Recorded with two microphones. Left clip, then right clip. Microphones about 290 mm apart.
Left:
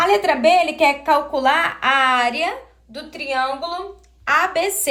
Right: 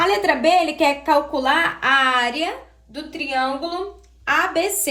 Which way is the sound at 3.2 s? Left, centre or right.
Centre.